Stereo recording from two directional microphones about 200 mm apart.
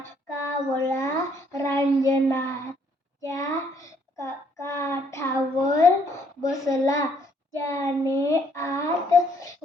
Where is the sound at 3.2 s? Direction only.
15° left (ahead or behind).